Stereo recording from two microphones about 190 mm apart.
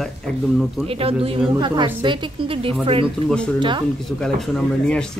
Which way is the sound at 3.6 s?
25° right (ahead or behind).